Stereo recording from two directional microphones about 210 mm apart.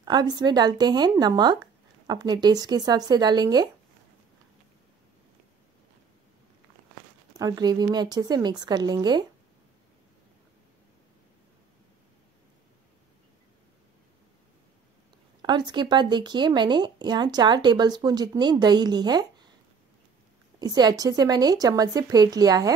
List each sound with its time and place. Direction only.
0.0 s a woman's voice: 20° right (ahead or behind)
7.3 s speech: 20° right (ahead or behind)
15.4 s speech: 20° right (ahead or behind)
20.5 s speech: 20° right (ahead or behind)